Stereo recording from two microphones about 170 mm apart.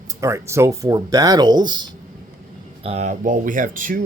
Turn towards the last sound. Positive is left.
turn(degrees=-50)  # may be behind; listen again after turning